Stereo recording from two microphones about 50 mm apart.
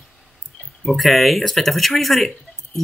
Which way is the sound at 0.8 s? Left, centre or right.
Centre.